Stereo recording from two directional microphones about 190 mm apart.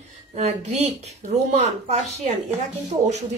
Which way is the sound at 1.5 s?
35° right (ahead or behind).